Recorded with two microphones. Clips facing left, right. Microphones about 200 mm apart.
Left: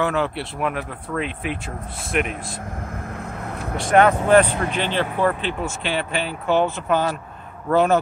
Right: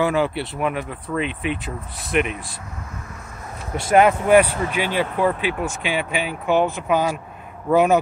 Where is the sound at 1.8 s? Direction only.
30° left (ahead or behind).